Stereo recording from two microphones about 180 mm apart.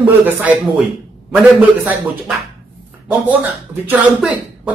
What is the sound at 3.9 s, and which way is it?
Speech, 10° right (ahead or behind).